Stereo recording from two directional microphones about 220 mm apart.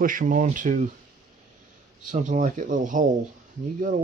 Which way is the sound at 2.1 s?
35° right (ahead or behind).